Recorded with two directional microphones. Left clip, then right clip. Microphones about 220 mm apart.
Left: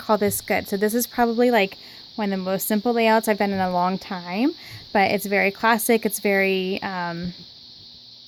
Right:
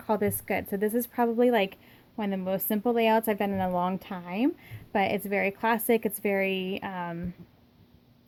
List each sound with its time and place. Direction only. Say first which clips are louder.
0.1 s speech: left 7 dB; 20° left (ahead or behind)